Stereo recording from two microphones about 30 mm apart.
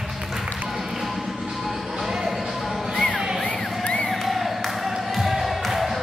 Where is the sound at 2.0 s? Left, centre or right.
Centre.